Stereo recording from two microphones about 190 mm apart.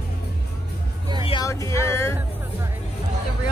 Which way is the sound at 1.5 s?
15° left (ahead or behind).